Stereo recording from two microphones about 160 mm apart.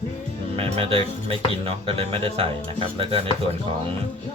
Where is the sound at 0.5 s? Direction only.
35° right (ahead or behind).